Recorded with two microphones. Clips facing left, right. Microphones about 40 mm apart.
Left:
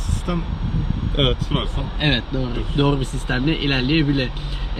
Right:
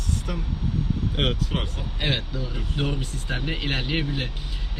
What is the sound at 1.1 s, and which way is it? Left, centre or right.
Speech, left.